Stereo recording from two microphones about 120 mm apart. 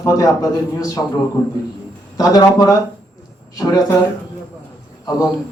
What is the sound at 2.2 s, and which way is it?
Speech, 30° left (ahead or behind).